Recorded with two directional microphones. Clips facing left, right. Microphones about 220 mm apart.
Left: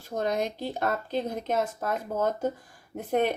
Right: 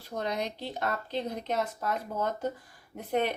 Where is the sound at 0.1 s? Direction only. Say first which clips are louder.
Left 5 dB; 45° left (ahead or behind).